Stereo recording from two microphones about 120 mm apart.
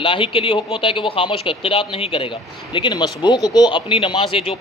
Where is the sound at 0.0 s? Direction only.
45° left (ahead or behind).